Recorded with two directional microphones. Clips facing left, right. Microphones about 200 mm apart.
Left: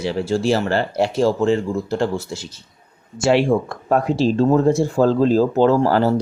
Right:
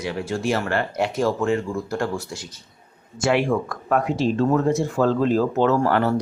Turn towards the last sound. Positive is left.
turn(degrees=30)  # may be behind; listen again after turning